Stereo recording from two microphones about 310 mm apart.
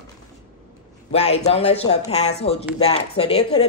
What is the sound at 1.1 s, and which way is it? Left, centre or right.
Speech, centre.